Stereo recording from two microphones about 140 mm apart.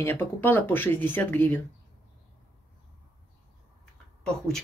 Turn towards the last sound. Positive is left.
turn(degrees=5)  # may be behind; listen again after turning